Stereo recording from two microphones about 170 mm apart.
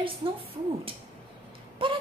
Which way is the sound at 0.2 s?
30° right (ahead or behind).